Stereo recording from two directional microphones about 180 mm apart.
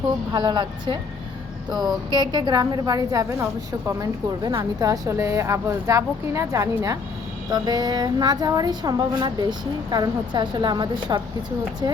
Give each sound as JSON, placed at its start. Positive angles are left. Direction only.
{"t": 0.3, "sound": "a woman's voice", "side_deg": -25}
{"t": 2.3, "sound": "a woman's voice", "side_deg": -25}